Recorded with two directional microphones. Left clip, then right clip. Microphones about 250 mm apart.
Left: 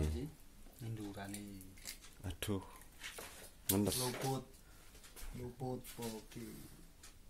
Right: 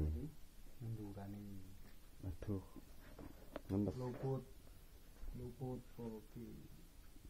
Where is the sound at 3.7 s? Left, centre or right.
Left.